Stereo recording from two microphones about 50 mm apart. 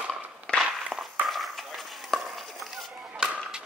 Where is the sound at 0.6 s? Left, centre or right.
Centre.